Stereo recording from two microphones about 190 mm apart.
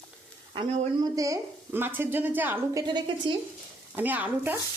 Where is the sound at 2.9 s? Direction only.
25° right (ahead or behind).